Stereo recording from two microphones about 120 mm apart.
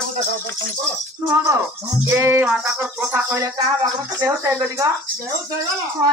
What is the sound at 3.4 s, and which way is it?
Speech, 30° right (ahead or behind).